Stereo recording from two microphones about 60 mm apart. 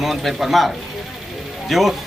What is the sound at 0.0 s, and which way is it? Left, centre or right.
Speech, centre.